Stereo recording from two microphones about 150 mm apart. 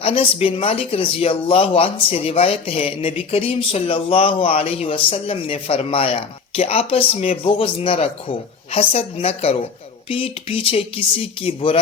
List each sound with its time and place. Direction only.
0.0 s speech: 40° left (ahead or behind)